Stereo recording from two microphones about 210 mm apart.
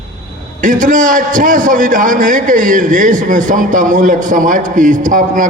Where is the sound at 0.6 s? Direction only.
40° right (ahead or behind).